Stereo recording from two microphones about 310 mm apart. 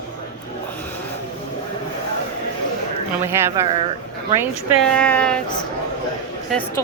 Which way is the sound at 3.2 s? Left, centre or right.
Centre.